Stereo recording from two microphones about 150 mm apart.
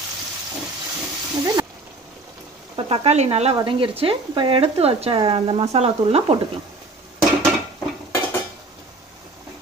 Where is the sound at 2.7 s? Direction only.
40° right (ahead or behind).